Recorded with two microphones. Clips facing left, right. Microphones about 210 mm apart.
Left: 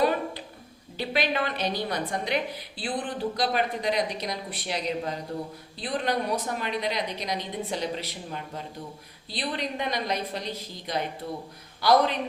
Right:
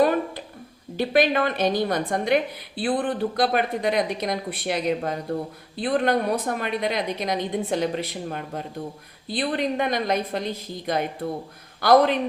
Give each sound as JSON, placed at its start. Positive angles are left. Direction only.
{"t": 0.9, "sound": "a woman's voice", "side_deg": -50}